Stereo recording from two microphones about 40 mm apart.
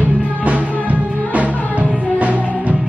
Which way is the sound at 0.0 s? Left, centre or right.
Right.